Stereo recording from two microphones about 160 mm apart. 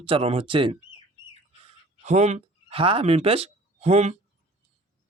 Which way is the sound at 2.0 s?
45° right (ahead or behind).